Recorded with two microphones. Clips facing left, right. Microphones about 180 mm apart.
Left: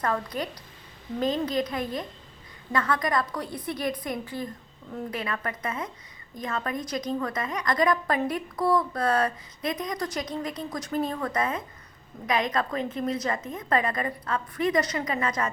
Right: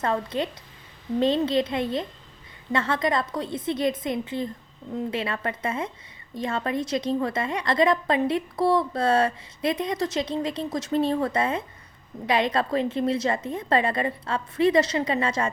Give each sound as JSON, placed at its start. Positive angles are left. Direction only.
{"t": 0.0, "sound": "a woman's voice", "side_deg": -25}